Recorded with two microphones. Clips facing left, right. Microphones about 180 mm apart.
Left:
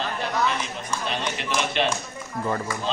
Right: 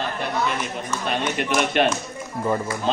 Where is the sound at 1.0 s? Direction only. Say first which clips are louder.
Right 6 dB; 55° right (ahead or behind).